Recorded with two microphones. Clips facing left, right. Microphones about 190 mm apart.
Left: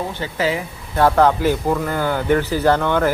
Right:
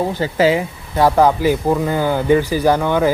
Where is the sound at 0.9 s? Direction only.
10° right (ahead or behind).